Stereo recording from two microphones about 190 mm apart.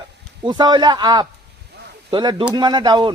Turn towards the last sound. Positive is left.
turn(degrees=-25)  # may be behind; listen again after turning